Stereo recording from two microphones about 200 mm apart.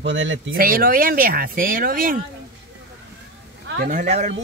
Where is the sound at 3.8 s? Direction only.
40° right (ahead or behind).